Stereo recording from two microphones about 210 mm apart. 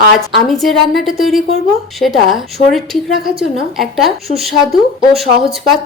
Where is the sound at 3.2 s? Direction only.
45° right (ahead or behind).